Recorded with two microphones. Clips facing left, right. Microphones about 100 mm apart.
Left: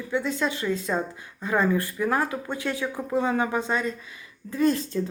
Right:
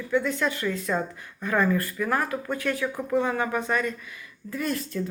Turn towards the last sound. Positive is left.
turn(degrees=25)  # may be behind; listen again after turning